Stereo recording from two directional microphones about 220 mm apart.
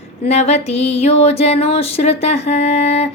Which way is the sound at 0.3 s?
30° left (ahead or behind).